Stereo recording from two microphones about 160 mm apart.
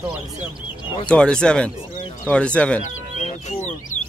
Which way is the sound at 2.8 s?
50° left (ahead or behind).